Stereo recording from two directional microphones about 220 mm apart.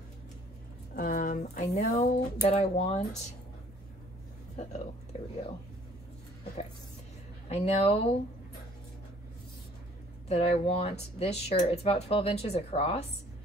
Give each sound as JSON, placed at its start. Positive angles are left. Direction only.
{"t": 0.9, "sound": "speech", "side_deg": 40}
{"t": 7.4, "sound": "speech", "side_deg": 25}
{"t": 10.2, "sound": "speech", "side_deg": 30}